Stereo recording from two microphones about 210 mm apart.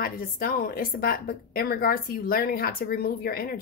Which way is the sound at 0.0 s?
45° left (ahead or behind).